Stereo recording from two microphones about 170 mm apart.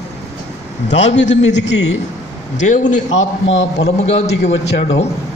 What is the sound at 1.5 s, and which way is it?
Speech, 90° left.